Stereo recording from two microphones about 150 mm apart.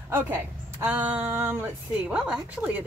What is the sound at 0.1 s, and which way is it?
A woman's voice, 15° right (ahead or behind).